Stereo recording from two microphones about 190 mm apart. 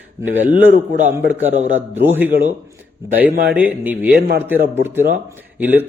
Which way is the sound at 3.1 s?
50° right (ahead or behind).